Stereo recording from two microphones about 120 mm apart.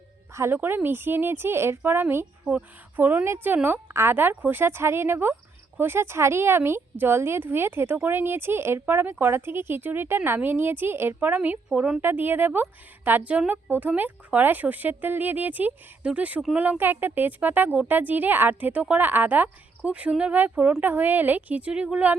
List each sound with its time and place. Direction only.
0.3 s a woman's voice: 20° right (ahead or behind)